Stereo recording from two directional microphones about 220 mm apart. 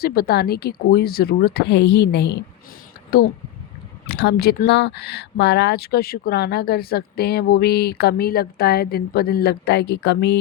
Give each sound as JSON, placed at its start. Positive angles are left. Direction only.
{"t": 0.0, "sound": "speech", "side_deg": 45}
{"t": 4.0, "sound": "speech", "side_deg": 50}